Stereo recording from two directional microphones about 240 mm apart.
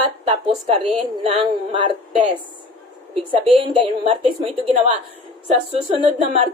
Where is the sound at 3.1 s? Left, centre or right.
Right.